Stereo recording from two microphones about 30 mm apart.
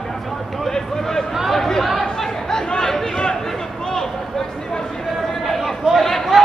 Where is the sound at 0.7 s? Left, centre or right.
Centre.